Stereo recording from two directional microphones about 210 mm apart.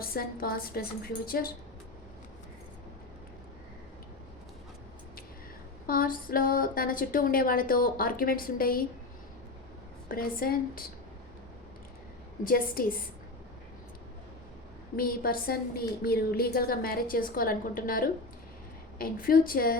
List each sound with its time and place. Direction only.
0.1 s a woman's voice: 45° left (ahead or behind)
5.8 s a woman's voice: 45° left (ahead or behind)
10.1 s a woman's voice: 45° left (ahead or behind)
12.5 s a woman's voice: 45° left (ahead or behind)
14.9 s a woman's voice: 45° left (ahead or behind)